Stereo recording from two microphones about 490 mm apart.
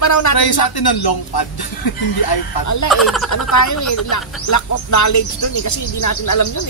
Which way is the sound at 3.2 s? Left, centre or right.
Left.